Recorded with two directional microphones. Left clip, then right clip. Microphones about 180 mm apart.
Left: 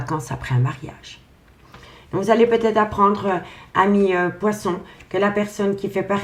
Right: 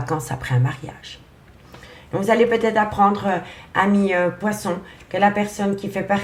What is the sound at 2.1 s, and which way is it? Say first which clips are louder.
Speech: left 1 dB; 25° right (ahead or behind).